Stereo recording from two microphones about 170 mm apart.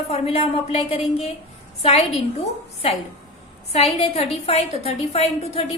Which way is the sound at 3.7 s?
35° left (ahead or behind).